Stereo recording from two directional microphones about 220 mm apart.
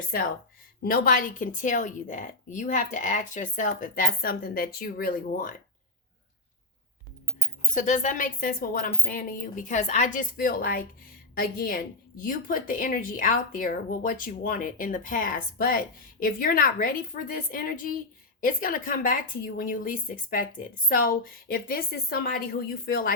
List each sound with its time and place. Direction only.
0.8 s a woman's voice: 40° left (ahead or behind)
7.7 s a woman's voice: 35° left (ahead or behind)